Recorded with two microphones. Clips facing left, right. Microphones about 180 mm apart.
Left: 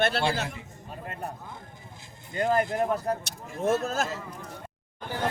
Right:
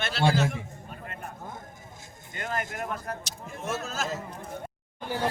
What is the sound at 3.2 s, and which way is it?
Speech, 60° left (ahead or behind).